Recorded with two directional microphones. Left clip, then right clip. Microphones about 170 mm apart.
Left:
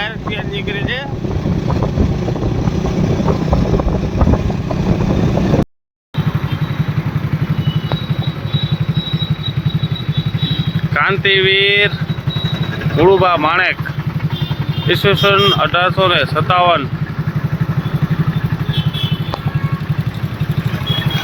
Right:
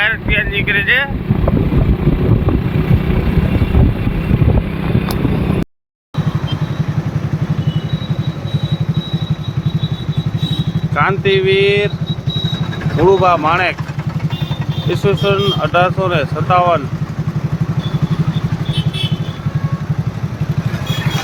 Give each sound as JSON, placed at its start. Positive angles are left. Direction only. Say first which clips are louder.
{"t": 0.0, "sound": "speech", "louder": "right 7 dB", "side_deg": 15}
{"t": 10.9, "sound": "speech", "louder": "left 1 dB", "side_deg": -10}
{"t": 13.2, "sound": "speech", "louder": "even", "side_deg": -5}
{"t": 14.8, "sound": "speech", "louder": "left 3 dB", "side_deg": -5}